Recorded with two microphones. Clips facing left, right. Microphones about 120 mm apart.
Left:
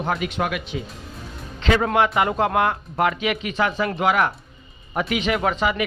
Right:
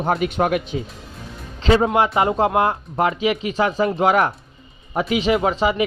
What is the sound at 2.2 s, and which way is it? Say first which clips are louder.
Speech: right 2 dB; 30° right (ahead or behind).